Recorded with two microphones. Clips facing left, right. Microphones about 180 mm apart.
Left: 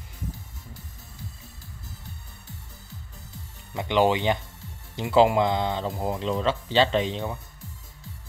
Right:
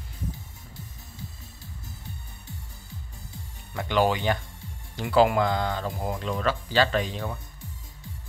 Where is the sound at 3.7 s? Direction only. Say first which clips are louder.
Left 2 dB; 20° left (ahead or behind).